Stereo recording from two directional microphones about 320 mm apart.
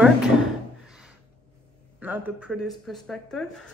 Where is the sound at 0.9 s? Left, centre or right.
Centre.